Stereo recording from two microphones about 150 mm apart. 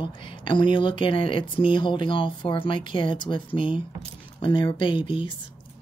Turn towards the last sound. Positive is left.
turn(degrees=35)  # may be behind; listen again after turning